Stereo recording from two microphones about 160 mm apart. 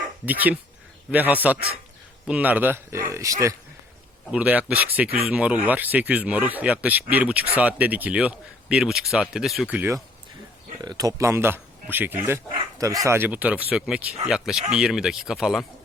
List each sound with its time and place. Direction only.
0.3 s a man's voice: 10° right (ahead or behind)
4.3 s speech: 10° right (ahead or behind)
10.8 s speech: 25° right (ahead or behind); by 15.6 s centre (ahead or behind)